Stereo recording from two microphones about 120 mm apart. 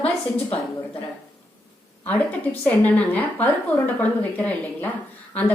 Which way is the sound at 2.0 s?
10° left (ahead or behind).